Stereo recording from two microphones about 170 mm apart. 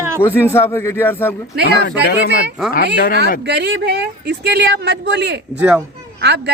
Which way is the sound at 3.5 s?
85° right.